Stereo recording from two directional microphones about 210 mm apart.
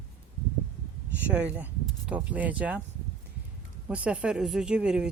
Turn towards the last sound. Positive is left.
turn(degrees=-5)  # may be behind; listen again after turning